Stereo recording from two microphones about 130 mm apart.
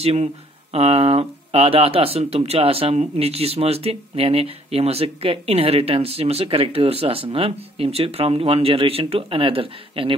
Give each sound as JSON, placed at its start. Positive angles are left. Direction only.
{"t": 0.0, "sound": "speech", "side_deg": -55}